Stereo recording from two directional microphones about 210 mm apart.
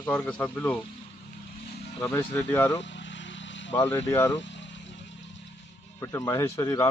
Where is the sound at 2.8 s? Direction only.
60° left (ahead or behind).